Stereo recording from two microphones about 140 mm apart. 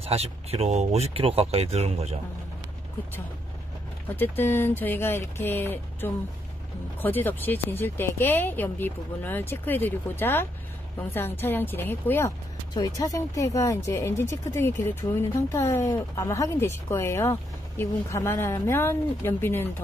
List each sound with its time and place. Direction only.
0.0 s speech: 45° right (ahead or behind)
4.2 s speech: 15° left (ahead or behind)
12.7 s speech: 25° left (ahead or behind)